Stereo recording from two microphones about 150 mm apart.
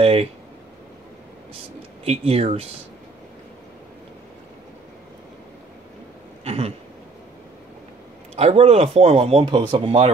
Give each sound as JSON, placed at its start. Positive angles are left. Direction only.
{"t": 0.0, "sound": "a sound", "side_deg": -40}
{"t": 2.0, "sound": "speech", "side_deg": -45}
{"t": 6.4, "sound": "throat clearing", "side_deg": -40}
{"t": 8.4, "sound": "speech", "side_deg": -45}
{"t": 9.5, "sound": "speech", "side_deg": -35}